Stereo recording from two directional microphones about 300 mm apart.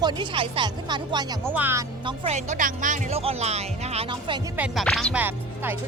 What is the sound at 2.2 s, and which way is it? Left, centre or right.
Speech, right.